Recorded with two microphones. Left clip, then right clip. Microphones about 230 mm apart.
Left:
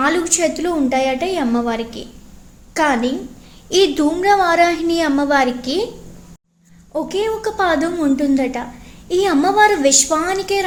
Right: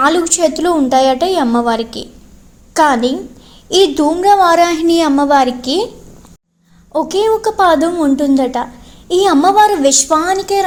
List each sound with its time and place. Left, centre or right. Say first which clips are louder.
0.0 s a woman's voice: right 5 dB; centre
6.9 s a woman's voice: right 7 dB; right